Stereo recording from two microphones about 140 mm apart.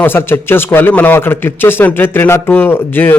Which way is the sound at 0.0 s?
15° left (ahead or behind).